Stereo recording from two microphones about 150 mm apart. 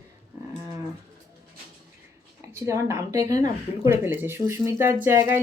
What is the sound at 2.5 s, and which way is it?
A woman's voice, 20° right (ahead or behind).